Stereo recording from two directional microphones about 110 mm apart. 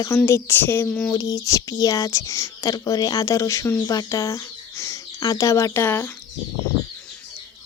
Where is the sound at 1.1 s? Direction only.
30° left (ahead or behind).